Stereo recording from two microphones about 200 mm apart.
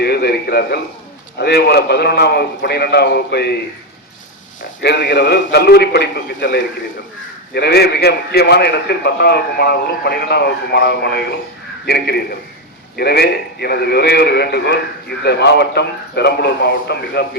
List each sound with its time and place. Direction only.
0.0 s a man's voice: 55° left (ahead or behind)
4.8 s a man's voice: 55° left (ahead or behind)